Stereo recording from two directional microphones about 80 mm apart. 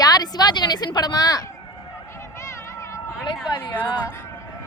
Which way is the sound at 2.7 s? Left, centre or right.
Left.